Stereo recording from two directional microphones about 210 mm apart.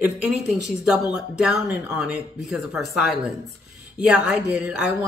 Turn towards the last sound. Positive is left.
turn(degrees=-5)  # may be behind; listen again after turning